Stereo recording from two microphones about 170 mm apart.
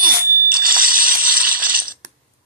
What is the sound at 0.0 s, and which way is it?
Coin, 55° right (ahead or behind).